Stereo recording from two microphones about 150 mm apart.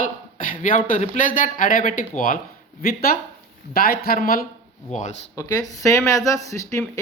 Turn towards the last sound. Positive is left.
turn(degrees=20)  # may be behind; listen again after turning